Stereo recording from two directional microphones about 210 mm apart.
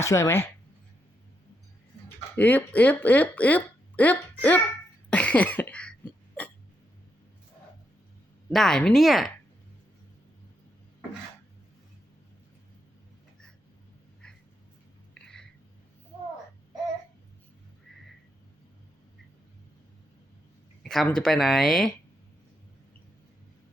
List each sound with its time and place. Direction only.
0.0 s speech: 15° left (ahead or behind)
2.3 s speech: 10° left (ahead or behind)
5.1 s cough: 5° left (ahead or behind)
8.4 s speech: centre (ahead or behind)
15.1 s a sound: 5° left (ahead or behind)
20.8 s speech: centre (ahead or behind)